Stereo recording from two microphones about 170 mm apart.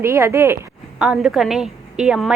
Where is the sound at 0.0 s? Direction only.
15° right (ahead or behind).